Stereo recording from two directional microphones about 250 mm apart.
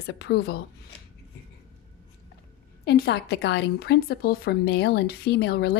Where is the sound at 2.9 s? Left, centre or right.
Left.